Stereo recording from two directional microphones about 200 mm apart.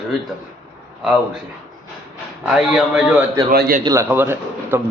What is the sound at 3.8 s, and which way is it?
Speech, 15° right (ahead or behind).